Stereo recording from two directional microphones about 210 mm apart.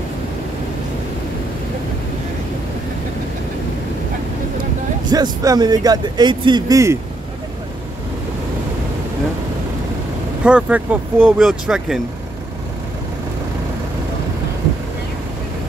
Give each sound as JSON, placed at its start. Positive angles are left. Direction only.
{"t": 5.0, "sound": "speech", "side_deg": -20}
{"t": 10.4, "sound": "speech", "side_deg": -5}